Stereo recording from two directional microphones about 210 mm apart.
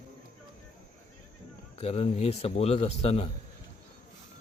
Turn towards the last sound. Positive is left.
turn(degrees=30)  # may be behind; listen again after turning